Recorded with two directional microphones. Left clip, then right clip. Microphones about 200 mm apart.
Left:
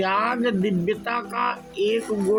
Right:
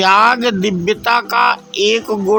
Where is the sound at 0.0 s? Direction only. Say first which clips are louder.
Right 12 dB; 55° right (ahead or behind).